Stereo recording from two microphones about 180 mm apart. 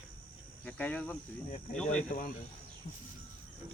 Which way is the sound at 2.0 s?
50° left (ahead or behind).